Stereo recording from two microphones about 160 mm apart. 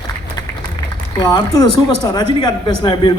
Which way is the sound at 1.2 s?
25° left (ahead or behind).